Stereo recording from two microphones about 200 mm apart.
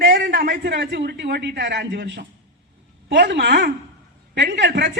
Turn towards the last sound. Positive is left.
turn(degrees=-60)  # may be behind; listen again after turning